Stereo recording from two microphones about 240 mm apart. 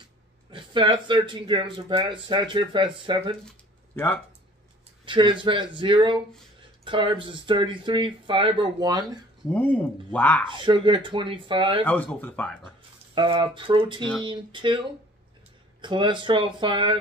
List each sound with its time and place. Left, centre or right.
0.5 s speech: centre
3.9 s speech: centre
5.0 s speech: centre
9.5 s speech: centre
10.5 s speech: centre
11.8 s speech: centre
13.1 s speech: centre
15.8 s speech: centre